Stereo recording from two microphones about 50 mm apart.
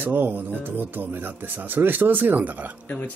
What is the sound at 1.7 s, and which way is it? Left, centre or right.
Speech, right.